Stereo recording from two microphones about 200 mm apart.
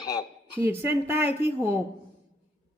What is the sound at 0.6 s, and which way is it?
A woman's voice, 10° right (ahead or behind).